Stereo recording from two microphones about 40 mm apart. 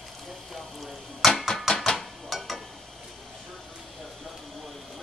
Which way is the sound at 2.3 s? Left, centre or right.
Centre.